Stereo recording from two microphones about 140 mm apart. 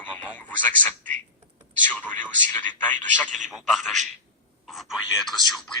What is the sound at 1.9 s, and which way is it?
Speech, 10° left (ahead or behind).